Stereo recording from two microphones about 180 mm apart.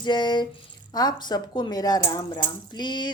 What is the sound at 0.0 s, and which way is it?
Speech, 25° left (ahead or behind).